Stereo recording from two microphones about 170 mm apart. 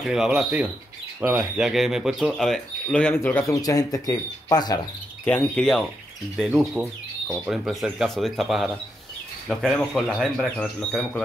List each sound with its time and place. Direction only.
0.0 s speech: 5° right (ahead or behind); by 4.8 s 25° left (ahead or behind)
5.2 s speech: 5° left (ahead or behind)